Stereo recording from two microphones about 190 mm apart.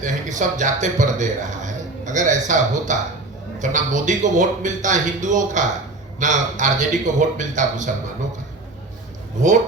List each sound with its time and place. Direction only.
0.0 s speech: 40° right (ahead or behind)